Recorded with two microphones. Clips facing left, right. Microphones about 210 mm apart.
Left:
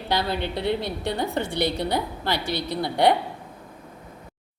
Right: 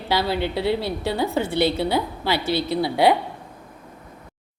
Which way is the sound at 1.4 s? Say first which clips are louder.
Right 6 dB; 15° left (ahead or behind).